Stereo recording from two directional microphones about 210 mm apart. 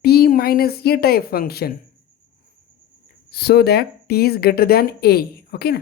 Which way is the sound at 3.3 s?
50° left (ahead or behind).